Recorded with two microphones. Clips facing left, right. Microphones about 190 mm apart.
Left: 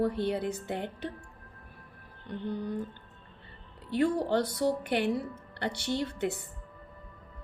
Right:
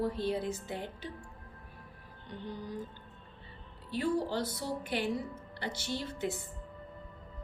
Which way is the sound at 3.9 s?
60° left (ahead or behind).